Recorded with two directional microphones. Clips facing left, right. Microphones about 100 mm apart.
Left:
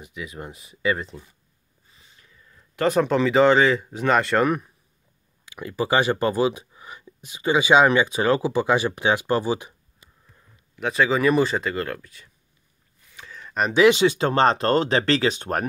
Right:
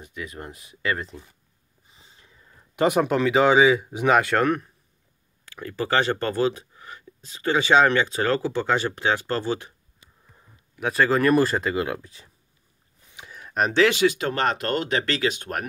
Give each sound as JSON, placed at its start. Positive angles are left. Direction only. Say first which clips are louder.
{"t": 0.0, "sound": "speech", "louder": "left 1 dB", "side_deg": 5}
{"t": 1.9, "sound": "a sound", "louder": "right 1 dB", "side_deg": -25}
{"t": 2.8, "sound": "speech", "louder": "even", "side_deg": -10}
{"t": 10.8, "sound": "speech", "louder": "even", "side_deg": 0}
{"t": 12.0, "sound": "speech", "louder": "right 1 dB", "side_deg": -30}
{"t": 13.1, "sound": "a sound", "louder": "even", "side_deg": -15}
{"t": 13.7, "sound": "speech", "louder": "left 4 dB", "side_deg": 20}